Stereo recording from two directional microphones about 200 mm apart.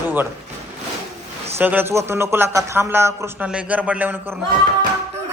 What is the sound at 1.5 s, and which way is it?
A man's voice, 10° right (ahead or behind).